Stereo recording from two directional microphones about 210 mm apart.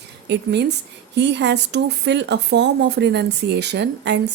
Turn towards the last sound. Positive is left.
turn(degrees=-55)  # may be behind; listen again after turning